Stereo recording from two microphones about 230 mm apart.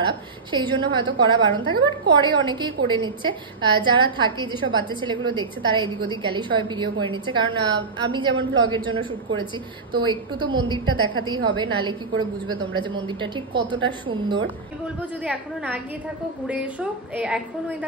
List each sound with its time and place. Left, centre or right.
0.5 s a woman's voice: right
15.2 s a woman's voice: centre